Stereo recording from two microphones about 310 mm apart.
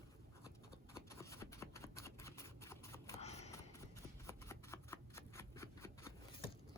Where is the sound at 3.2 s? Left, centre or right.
Left.